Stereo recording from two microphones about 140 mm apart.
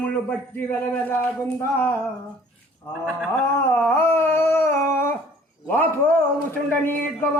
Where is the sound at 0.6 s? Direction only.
15° left (ahead or behind).